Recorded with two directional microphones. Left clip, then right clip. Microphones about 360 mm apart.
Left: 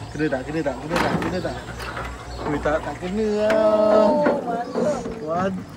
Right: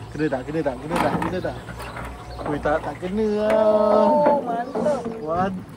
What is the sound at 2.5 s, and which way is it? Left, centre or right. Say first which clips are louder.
Speech: even; centre.